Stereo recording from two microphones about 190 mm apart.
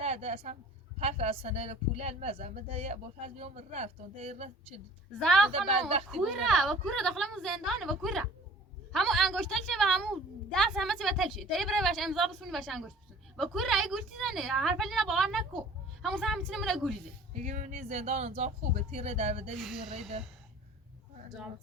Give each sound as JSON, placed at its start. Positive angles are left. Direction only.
{"t": 0.0, "sound": "a woman's voice", "side_deg": -35}
{"t": 5.2, "sound": "a woman's voice", "side_deg": 0}
{"t": 5.5, "sound": "a woman's voice", "side_deg": -30}
{"t": 6.2, "sound": "a woman's voice", "side_deg": 0}
{"t": 17.4, "sound": "a woman's voice", "side_deg": -40}
{"t": 19.5, "sound": "a woman's voice", "side_deg": 0}